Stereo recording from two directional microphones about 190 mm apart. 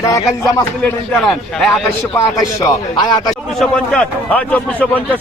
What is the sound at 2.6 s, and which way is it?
Speech, 20° left (ahead or behind).